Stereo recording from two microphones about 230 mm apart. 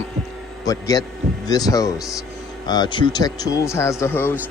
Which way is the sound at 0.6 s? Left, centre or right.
Centre.